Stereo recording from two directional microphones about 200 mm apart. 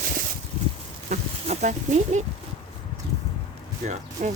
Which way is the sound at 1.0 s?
35° right (ahead or behind).